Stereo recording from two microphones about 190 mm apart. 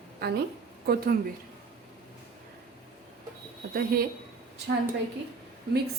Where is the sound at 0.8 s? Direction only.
55° right (ahead or behind).